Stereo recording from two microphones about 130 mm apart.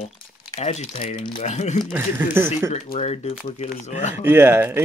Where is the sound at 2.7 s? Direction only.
65° left (ahead or behind).